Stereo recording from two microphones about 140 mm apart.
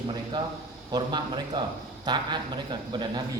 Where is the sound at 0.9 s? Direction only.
30° right (ahead or behind).